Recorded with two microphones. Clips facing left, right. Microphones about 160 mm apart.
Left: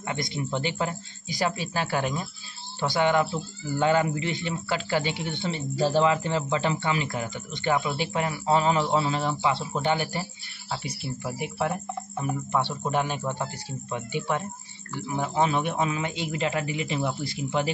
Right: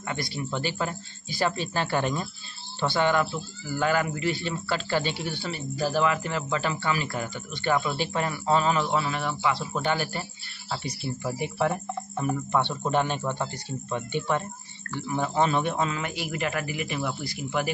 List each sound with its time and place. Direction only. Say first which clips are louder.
0.0 s speech: left 1 dB; 20° left (ahead or behind)
10.7 s speech: right 1 dB; 5° left (ahead or behind); by 17.6 s 25° left (ahead or behind)